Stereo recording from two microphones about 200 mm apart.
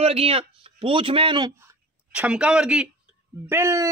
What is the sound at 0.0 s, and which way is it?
A man's voice, 30° right (ahead or behind).